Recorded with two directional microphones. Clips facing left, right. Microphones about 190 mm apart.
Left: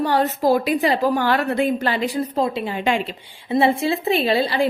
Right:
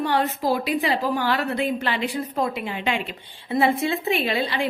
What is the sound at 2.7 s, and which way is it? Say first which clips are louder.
Speech: left 5 dB; 40° left (ahead or behind).